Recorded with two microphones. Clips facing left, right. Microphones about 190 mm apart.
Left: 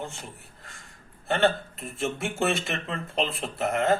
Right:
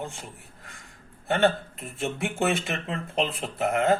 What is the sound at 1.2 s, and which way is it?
Speech, 15° right (ahead or behind).